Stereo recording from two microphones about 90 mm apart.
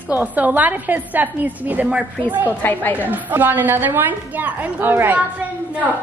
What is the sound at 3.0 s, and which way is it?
A woman's voice, 20° right (ahead or behind).